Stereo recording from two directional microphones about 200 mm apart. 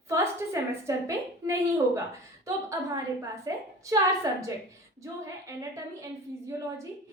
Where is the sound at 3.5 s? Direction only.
15° right (ahead or behind).